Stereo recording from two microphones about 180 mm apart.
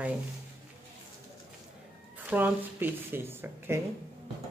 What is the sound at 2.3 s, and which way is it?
Speech, 10° right (ahead or behind).